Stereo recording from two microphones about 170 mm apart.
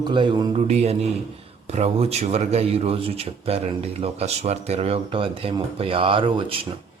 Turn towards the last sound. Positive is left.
turn(degrees=-30)  # may be behind; listen again after turning